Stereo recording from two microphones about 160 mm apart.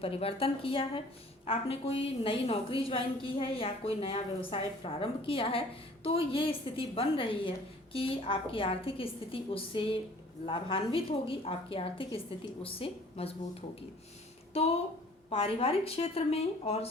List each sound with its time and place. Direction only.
0.0 s a woman's voice: 35° left (ahead or behind)